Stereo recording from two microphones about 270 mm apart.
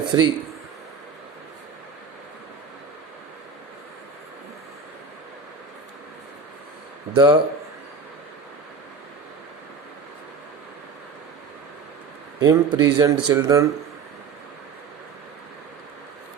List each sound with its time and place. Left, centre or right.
0.0 s speech: centre
7.1 s speech: centre
12.4 s speech: centre